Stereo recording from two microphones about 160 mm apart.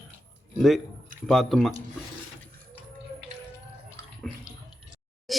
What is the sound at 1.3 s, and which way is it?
Speech, centre (ahead or behind).